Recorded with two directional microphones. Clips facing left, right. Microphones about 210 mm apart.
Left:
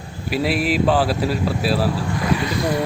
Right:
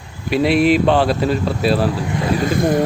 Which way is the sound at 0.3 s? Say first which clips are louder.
Right 6 dB; 5° left (ahead or behind).